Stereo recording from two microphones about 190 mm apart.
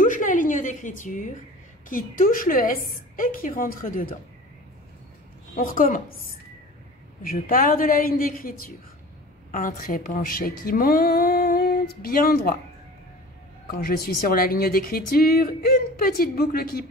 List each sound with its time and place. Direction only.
0.0 s a sound: 45° left (ahead or behind)
1.9 s a woman's voice: 45° left (ahead or behind)
5.6 s a woman's voice: 45° left (ahead or behind)
7.2 s a woman's voice: 50° left (ahead or behind)
13.7 s a woman's voice: 50° left (ahead or behind)